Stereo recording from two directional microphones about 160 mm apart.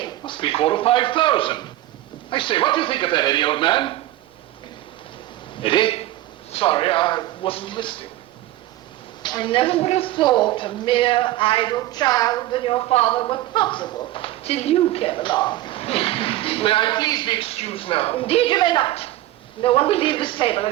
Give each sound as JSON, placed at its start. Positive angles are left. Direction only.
{"t": 0.0, "sound": "a woman's voice", "side_deg": 30}
{"t": 5.5, "sound": "a man's voice", "side_deg": 30}
{"t": 9.2, "sound": "a woman's voice", "side_deg": 30}